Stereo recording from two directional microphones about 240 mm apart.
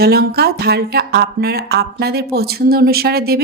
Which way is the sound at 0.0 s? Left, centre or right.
Right.